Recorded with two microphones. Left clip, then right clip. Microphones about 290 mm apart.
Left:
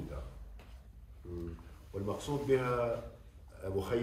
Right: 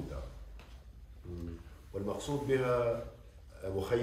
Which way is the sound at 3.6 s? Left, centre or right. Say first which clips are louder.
Right 1 dB; centre.